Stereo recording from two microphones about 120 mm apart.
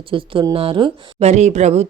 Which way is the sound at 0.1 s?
45° right (ahead or behind).